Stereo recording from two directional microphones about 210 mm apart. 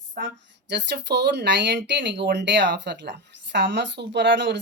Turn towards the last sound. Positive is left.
turn(degrees=-55)  # may be behind; listen again after turning